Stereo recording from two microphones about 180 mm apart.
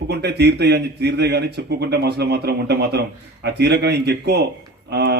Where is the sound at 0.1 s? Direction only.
65° right (ahead or behind).